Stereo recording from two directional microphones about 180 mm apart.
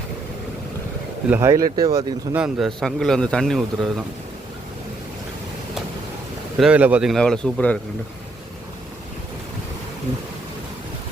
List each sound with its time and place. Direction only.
1.3 s speech: 15° right (ahead or behind)
2.4 s a man's voice: centre (ahead or behind)
6.6 s a man's voice: 5° right (ahead or behind)